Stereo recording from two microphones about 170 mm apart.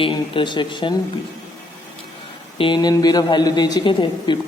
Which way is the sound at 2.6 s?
25° left (ahead or behind).